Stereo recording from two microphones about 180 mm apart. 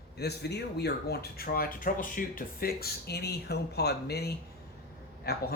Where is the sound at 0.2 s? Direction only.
65° left (ahead or behind).